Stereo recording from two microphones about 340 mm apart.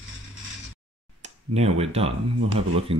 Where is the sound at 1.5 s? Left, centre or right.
Centre.